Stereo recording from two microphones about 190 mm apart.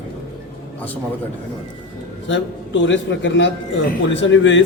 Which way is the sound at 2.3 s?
75° left (ahead or behind).